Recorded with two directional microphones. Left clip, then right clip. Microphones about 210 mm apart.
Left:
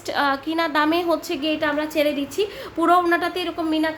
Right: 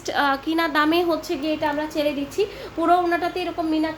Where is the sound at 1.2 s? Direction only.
20° left (ahead or behind).